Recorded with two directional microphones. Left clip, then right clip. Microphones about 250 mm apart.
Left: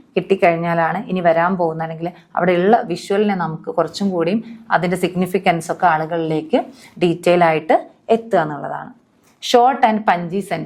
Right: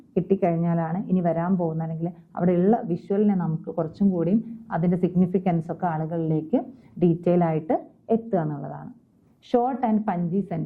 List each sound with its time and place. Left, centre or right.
0.1 s a woman's voice: centre
1.5 s speech: left
1.8 s a woman's voice: centre
3.5 s speech: centre
4.2 s a woman's voice: centre